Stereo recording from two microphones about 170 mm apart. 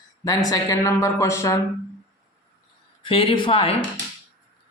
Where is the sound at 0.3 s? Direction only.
20° left (ahead or behind).